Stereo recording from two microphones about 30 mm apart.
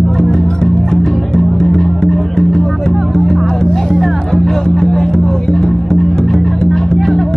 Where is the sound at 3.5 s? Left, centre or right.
Centre.